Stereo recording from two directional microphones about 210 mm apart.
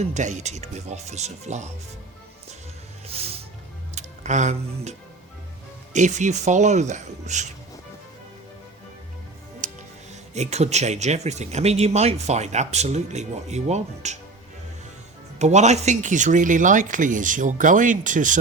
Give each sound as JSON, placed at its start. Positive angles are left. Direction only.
{"t": 0.0, "sound": "speech", "side_deg": -35}
{"t": 3.9, "sound": "speech", "side_deg": -35}
{"t": 9.6, "sound": "music", "side_deg": -40}
{"t": 10.3, "sound": "speech", "side_deg": -30}
{"t": 15.4, "sound": "speech", "side_deg": -35}